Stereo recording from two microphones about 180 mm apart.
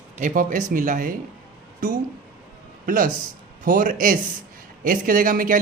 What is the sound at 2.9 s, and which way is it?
A man's voice, 50° right (ahead or behind).